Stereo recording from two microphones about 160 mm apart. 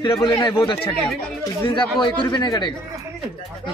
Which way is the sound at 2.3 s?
25° left (ahead or behind).